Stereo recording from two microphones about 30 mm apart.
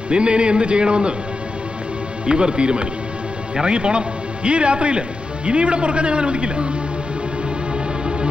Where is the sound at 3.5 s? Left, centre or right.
Right.